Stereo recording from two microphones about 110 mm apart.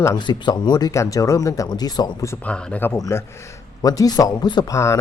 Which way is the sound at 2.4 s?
10° left (ahead or behind).